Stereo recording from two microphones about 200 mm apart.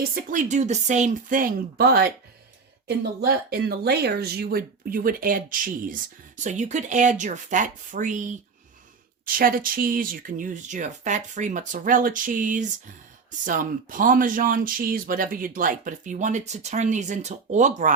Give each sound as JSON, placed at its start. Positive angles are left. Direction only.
{"t": 0.1, "sound": "speech", "side_deg": -40}